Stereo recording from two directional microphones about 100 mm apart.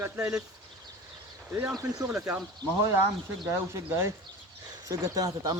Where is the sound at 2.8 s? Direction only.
25° right (ahead or behind).